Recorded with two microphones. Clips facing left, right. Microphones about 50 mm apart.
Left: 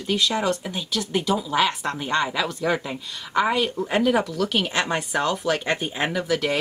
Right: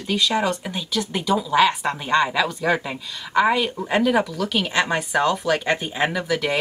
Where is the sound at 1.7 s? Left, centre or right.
Centre.